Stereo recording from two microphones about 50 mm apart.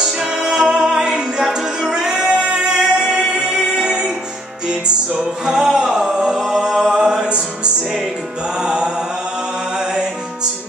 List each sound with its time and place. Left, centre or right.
0.0 s music: centre
8.5 s mantra: centre